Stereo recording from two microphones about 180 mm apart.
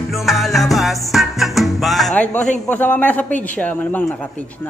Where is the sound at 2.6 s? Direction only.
10° left (ahead or behind).